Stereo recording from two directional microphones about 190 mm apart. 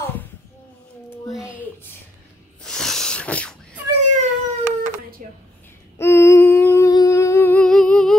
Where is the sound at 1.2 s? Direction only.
5° right (ahead or behind).